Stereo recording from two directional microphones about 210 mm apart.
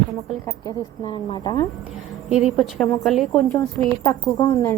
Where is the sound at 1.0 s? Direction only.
25° left (ahead or behind).